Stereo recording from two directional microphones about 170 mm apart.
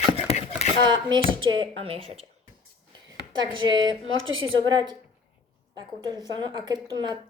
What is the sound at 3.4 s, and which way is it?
A woman's voice, 25° right (ahead or behind).